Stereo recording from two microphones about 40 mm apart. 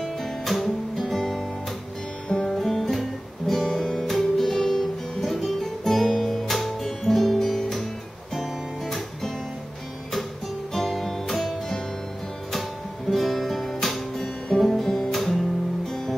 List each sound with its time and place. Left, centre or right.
0.2 s music: centre
2.5 s guitar: centre
8.4 s music: centre
10.7 s music: centre
13.1 s music: centre